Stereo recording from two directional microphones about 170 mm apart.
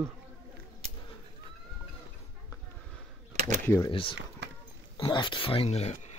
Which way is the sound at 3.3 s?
40° right (ahead or behind).